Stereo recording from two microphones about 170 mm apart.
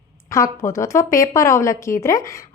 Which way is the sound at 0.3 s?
20° left (ahead or behind).